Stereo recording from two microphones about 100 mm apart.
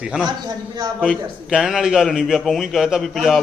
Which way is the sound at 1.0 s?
5° right (ahead or behind).